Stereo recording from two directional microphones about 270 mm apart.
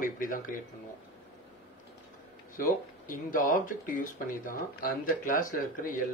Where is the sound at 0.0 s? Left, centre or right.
Left.